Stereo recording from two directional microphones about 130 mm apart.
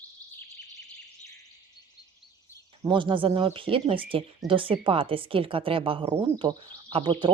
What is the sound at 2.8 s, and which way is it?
Speech, 40° right (ahead or behind).